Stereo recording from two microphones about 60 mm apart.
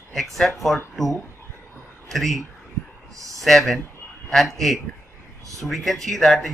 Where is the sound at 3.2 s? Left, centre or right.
Right.